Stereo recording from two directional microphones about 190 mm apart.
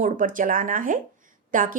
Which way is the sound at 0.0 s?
45° right (ahead or behind).